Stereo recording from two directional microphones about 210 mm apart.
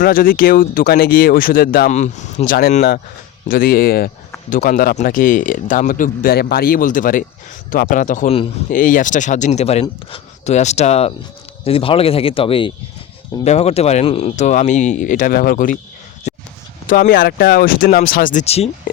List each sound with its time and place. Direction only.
0.0 s speech: 45° left (ahead or behind)
16.8 s speech: 40° left (ahead or behind)